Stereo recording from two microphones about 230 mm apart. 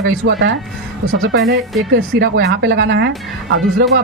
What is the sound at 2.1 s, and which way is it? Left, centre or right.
Speech, right.